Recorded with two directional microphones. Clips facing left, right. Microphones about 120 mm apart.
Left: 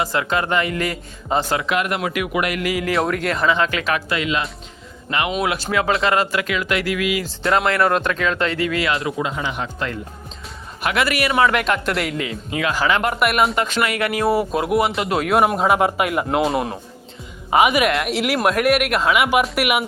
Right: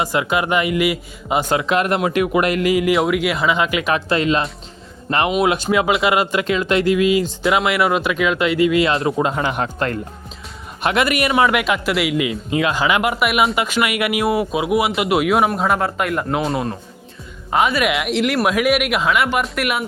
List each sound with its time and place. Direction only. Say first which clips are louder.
0.0 s speech: right 2 dB; 15° right (ahead or behind)
1.5 s speech: right 4 dB; 30° right (ahead or behind)
2.9 s speech: right 3 dB; 5° right (ahead or behind)
3.9 s speech: right 4 dB; 35° right (ahead or behind)
5.4 s speech: right 4 dB; 20° right (ahead or behind)
6.4 s speech: right 5 dB; 25° right (ahead or behind)
7.4 s speech: left 2 dB; 5° right (ahead or behind)
8.9 s speech: right 4 dB; 30° right (ahead or behind)
9.2 s speech: right 5 dB; 50° right (ahead or behind)
10.8 s speech: right 2 dB; 20° right (ahead or behind)
11.6 s speech: right 2 dB; 5° right (ahead or behind)
14.5 s speech: right 1 dB; 5° right (ahead or behind)
15.5 s speech: left 2 dB; 5° left (ahead or behind)